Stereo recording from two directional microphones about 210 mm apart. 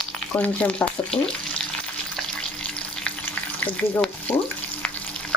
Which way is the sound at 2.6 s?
5° left (ahead or behind).